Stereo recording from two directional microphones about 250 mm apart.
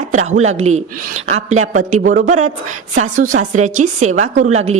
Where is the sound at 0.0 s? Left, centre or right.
Right.